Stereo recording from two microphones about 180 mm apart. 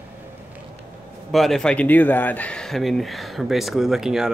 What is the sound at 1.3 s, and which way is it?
Speech, centre (ahead or behind).